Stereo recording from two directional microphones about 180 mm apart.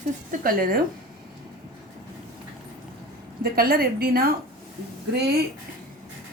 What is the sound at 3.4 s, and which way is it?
A woman's voice, 55° right (ahead or behind).